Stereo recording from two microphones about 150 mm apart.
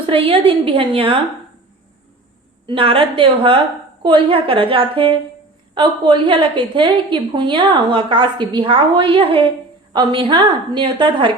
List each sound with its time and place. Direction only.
0.0 s a woman's voice: 40° right (ahead or behind)
2.6 s a woman's voice: 35° right (ahead or behind)